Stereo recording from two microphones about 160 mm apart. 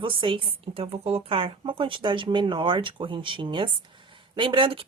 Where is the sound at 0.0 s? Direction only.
30° right (ahead or behind).